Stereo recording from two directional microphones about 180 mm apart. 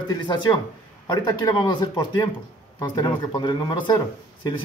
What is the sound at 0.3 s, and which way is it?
Speech, 25° left (ahead or behind).